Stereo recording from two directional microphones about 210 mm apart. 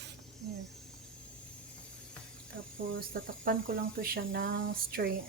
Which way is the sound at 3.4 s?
40° right (ahead or behind).